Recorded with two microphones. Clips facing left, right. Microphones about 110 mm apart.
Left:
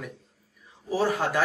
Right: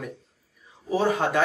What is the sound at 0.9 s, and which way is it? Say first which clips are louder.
Speech: right 2 dB; centre (ahead or behind).